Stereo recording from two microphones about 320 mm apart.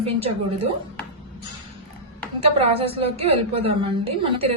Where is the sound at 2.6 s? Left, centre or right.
Centre.